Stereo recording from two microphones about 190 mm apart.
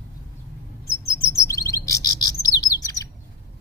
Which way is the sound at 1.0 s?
15° left (ahead or behind).